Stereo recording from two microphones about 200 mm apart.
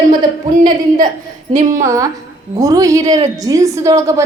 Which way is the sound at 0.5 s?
40° right (ahead or behind).